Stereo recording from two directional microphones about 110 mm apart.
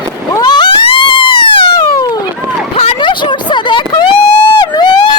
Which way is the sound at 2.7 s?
65° left (ahead or behind).